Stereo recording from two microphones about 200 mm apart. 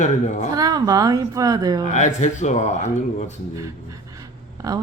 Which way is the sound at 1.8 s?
35° left (ahead or behind).